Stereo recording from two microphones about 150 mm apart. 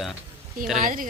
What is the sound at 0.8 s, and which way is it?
Speech, 65° right (ahead or behind).